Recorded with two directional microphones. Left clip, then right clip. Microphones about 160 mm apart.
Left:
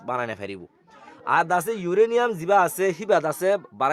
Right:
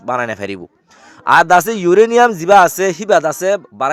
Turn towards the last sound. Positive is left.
turn(degrees=-20)  # may be behind; listen again after turning